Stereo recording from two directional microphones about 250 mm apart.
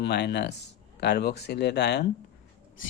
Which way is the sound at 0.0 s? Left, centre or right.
Left.